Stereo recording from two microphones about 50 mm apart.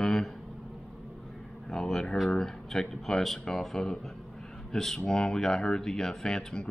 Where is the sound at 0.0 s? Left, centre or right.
Centre.